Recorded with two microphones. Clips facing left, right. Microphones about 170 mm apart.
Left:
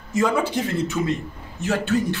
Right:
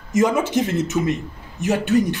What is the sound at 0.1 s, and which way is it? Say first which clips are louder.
A man's voice: right 3 dB; 20° right (ahead or behind).